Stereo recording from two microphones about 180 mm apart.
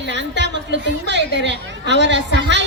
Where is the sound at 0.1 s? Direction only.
75° right (ahead or behind).